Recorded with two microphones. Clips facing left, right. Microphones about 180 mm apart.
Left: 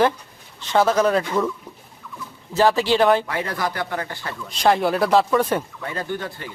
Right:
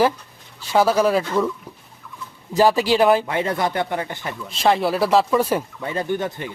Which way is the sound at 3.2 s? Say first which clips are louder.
Right 4 dB; 20° right (ahead or behind).